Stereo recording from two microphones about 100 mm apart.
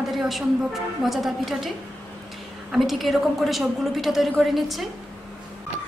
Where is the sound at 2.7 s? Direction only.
Centre (ahead or behind).